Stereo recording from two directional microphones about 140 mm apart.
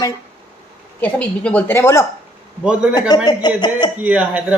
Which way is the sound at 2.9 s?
30° left (ahead or behind).